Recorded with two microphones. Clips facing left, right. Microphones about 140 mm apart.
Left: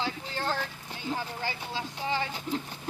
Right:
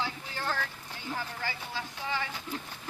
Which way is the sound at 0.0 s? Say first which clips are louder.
Left 3 dB; 25° left (ahead or behind).